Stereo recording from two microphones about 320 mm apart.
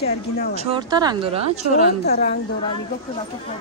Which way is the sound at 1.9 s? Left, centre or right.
Left.